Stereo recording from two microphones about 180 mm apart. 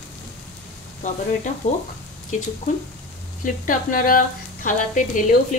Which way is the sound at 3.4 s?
45° left (ahead or behind).